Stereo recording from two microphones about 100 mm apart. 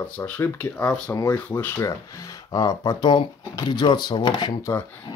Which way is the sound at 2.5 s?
35° left (ahead or behind).